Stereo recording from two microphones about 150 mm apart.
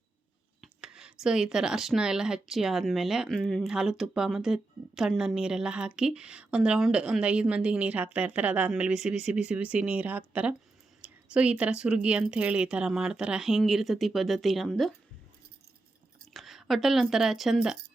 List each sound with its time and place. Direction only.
0.6 s speech: 5° right (ahead or behind)
16.3 s speech: centre (ahead or behind)